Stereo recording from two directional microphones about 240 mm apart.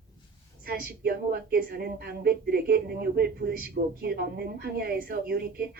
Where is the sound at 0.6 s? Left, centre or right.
Right.